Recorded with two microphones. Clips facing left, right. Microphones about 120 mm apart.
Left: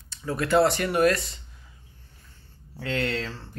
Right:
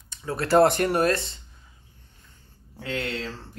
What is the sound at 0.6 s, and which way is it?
Speech, 50° right (ahead or behind).